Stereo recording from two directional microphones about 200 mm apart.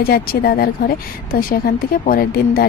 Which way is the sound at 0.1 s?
50° left (ahead or behind).